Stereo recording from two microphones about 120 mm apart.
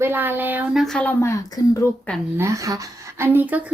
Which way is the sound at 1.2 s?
25° left (ahead or behind).